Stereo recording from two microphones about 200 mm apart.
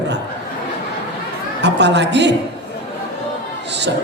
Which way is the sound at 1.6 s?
60° right (ahead or behind).